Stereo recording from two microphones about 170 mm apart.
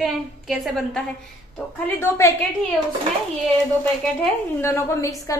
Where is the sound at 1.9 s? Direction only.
15° left (ahead or behind).